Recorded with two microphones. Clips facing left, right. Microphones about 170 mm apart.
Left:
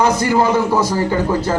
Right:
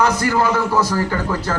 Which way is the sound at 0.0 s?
20° left (ahead or behind).